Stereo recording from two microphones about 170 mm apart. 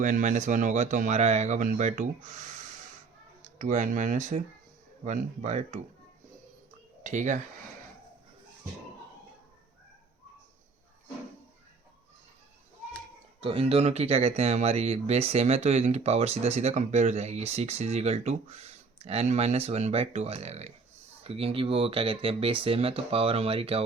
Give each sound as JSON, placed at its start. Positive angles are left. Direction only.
{"t": 0.0, "sound": "speech", "side_deg": -45}
{"t": 7.0, "sound": "speech", "side_deg": -45}
{"t": 13.4, "sound": "speech", "side_deg": -35}